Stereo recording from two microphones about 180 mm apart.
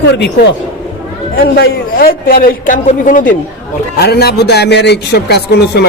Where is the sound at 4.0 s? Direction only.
60° left (ahead or behind).